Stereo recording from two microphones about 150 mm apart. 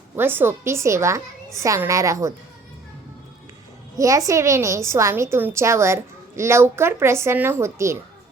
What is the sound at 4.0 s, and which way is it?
A woman's voice, 20° right (ahead or behind).